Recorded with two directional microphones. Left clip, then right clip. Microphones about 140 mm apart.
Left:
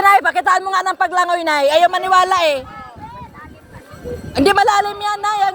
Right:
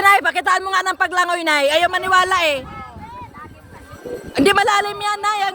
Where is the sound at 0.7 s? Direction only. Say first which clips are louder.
Left 2 dB; 30° right (ahead or behind); by 2.6 s 15° right (ahead or behind).